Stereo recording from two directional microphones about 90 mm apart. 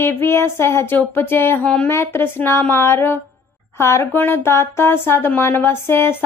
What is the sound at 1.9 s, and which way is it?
Speech, 30° left (ahead or behind).